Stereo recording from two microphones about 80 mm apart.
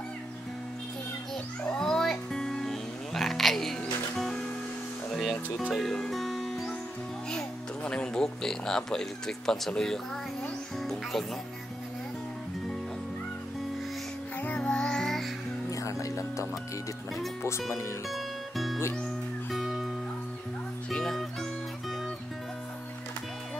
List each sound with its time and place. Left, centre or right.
1.8 s music: centre
5.1 s music: centre
7.2 s music: centre
9.5 s speech: centre
10.8 s music: centre
14.4 s music: centre
15.7 s music: left
17.4 s speech: left
18.1 s music: centre
20.9 s music: centre